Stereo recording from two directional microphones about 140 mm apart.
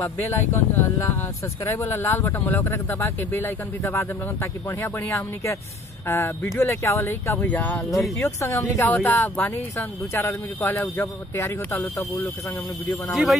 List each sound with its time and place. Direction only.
0.0 s speech: 15° left (ahead or behind)
13.1 s speech: centre (ahead or behind)